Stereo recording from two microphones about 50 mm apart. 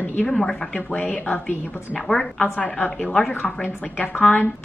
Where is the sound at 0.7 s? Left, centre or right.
Left.